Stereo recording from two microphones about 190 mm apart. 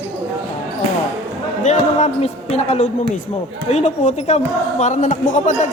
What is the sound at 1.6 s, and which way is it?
A man's voice, 40° left (ahead or behind).